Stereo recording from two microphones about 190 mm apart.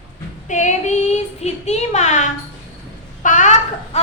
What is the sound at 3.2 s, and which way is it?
Babbling, 40° left (ahead or behind).